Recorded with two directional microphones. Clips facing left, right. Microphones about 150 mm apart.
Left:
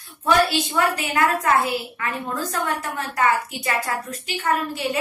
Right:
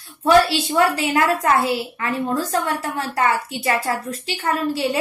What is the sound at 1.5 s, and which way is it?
A woman's voice, 30° right (ahead or behind).